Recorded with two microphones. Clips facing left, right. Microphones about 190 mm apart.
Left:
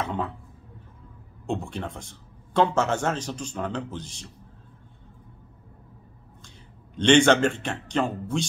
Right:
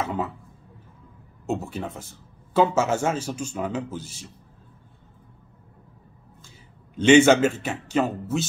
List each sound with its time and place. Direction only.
0.0 s a sound: 5° right (ahead or behind)
1.4 s a man's voice: 5° right (ahead or behind)
7.0 s a man's voice: 5° right (ahead or behind)